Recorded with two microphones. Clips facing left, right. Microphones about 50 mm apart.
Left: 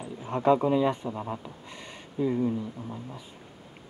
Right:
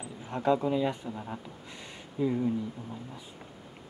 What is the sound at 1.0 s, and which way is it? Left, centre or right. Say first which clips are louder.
Speech: left 5 dB; left.